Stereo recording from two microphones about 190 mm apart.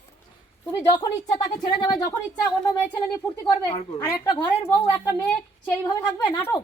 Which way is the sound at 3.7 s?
25° left (ahead or behind).